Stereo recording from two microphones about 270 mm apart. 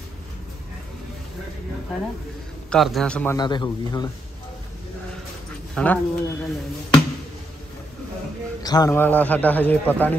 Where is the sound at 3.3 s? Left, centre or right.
Centre.